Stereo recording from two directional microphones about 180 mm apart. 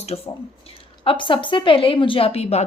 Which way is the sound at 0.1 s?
30° left (ahead or behind).